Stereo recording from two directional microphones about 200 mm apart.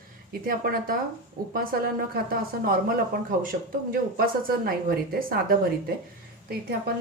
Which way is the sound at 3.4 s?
45° right (ahead or behind).